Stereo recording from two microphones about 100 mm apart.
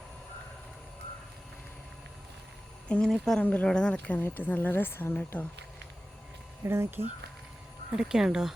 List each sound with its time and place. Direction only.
2.9 s a woman's voice: 5° left (ahead or behind)
6.7 s speech: 25° right (ahead or behind)
7.9 s speech: 5° right (ahead or behind)